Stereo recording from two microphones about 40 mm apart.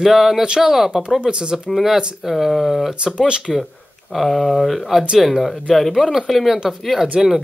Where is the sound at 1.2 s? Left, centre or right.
Centre.